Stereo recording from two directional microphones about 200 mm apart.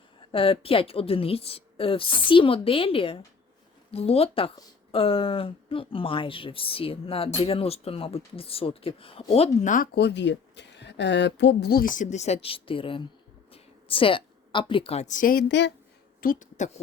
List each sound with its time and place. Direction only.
0.3 s a woman's voice: 25° left (ahead or behind); by 15.7 s 60° left (ahead or behind)
16.2 s a woman's voice: 40° left (ahead or behind)